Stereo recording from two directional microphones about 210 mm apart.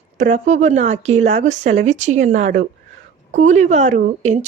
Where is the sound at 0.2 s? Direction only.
35° right (ahead or behind).